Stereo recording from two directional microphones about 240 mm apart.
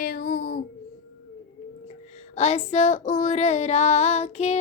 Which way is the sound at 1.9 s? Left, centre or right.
Left.